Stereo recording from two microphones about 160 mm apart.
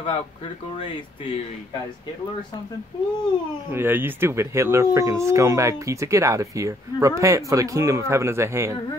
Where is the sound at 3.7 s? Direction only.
15° right (ahead or behind).